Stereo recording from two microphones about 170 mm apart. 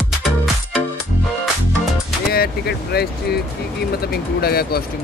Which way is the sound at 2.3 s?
65° left (ahead or behind).